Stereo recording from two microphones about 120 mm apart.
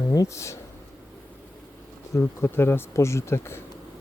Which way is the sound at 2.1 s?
20° left (ahead or behind).